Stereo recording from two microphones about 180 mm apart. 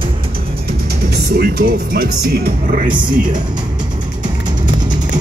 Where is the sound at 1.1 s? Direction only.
60° right (ahead or behind).